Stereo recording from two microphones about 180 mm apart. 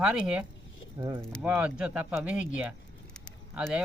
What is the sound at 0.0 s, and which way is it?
Speech, 5° right (ahead or behind).